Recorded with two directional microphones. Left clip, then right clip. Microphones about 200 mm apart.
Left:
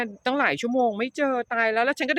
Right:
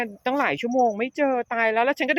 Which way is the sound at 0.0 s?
Centre (ahead or behind).